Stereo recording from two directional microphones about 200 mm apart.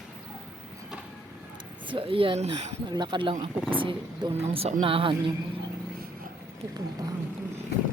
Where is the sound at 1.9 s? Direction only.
25° right (ahead or behind).